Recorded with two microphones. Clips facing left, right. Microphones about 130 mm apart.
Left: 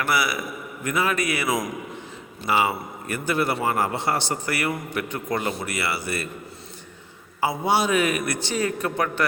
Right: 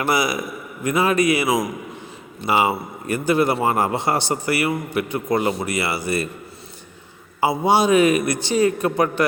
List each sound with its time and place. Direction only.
0.0 s a man's voice: 20° right (ahead or behind)
2.5 s a man's voice: 15° right (ahead or behind)
7.4 s a man's voice: 15° right (ahead or behind)